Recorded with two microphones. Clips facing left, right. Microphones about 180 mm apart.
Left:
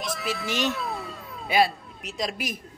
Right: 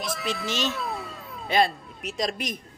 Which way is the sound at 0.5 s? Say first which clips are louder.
Left 3 dB; 15° left (ahead or behind).